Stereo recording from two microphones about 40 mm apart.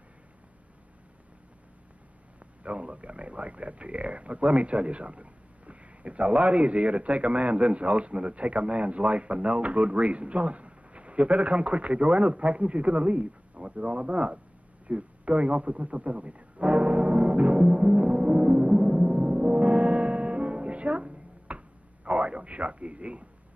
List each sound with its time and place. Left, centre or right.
2.6 s a man's voice: right
14.9 s music: right